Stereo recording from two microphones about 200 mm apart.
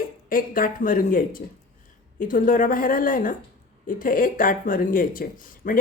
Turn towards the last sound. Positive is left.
turn(degrees=45)  # may be behind; listen again after turning